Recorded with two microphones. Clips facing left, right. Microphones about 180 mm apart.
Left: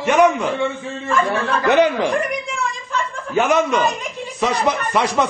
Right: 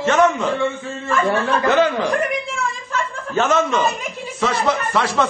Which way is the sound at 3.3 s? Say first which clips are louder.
Left 1 dB; 15° left (ahead or behind).